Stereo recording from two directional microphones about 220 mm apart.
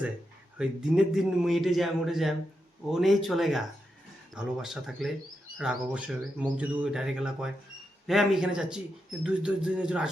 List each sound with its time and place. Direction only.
0.6 s a man's voice: 5° right (ahead or behind)